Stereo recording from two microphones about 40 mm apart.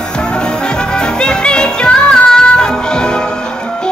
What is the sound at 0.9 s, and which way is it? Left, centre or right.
Music, left.